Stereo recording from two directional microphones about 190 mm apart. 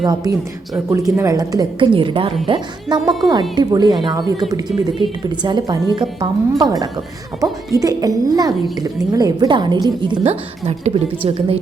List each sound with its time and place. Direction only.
0.0 s a woman's voice: 20° right (ahead or behind)